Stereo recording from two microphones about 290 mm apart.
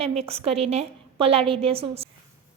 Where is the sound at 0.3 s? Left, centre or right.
Centre.